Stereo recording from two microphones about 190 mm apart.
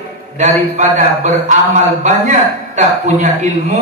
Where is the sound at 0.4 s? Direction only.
40° right (ahead or behind).